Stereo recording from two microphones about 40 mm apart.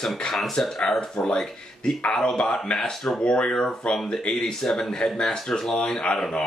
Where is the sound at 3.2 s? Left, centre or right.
Left.